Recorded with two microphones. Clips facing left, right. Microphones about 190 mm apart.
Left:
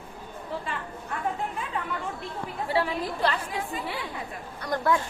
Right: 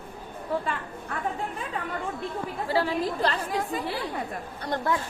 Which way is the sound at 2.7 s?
40° right (ahead or behind).